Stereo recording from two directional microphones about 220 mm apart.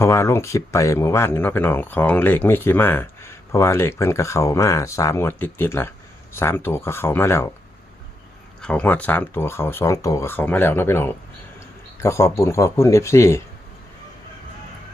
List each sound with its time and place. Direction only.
0.0 s speech: 10° left (ahead or behind)
8.6 s speech: 5° left (ahead or behind)